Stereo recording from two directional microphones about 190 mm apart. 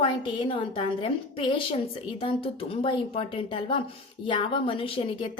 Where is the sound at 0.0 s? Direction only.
25° left (ahead or behind).